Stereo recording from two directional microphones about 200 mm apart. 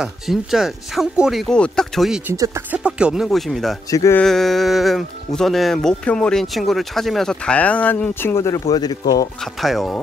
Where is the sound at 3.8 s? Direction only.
15° left (ahead or behind).